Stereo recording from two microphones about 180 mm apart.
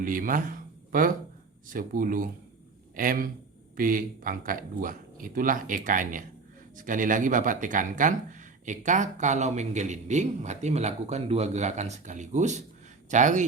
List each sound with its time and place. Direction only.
0.0 s a man's voice: 50° right (ahead or behind)